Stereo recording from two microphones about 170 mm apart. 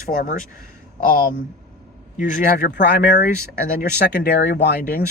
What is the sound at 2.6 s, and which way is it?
Speech, 90° left.